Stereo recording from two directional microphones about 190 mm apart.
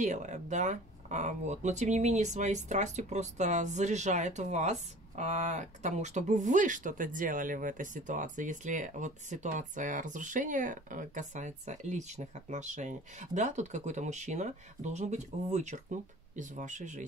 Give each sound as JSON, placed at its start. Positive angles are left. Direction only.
{"t": 0.0, "sound": "speech", "side_deg": -40}